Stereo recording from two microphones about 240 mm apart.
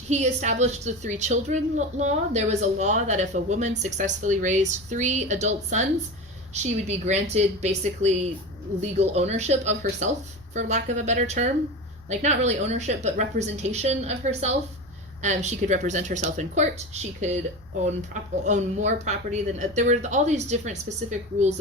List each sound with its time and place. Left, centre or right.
0.1 s speech: right